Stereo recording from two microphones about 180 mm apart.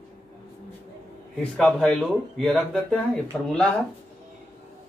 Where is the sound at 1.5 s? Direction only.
5° left (ahead or behind).